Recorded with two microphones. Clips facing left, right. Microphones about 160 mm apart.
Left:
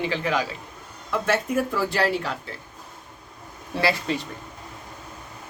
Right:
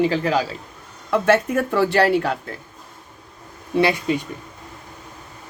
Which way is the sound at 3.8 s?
15° right (ahead or behind).